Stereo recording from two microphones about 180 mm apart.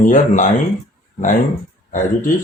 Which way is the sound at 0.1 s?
45° left (ahead or behind).